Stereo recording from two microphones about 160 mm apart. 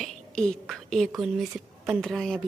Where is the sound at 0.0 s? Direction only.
5° left (ahead or behind).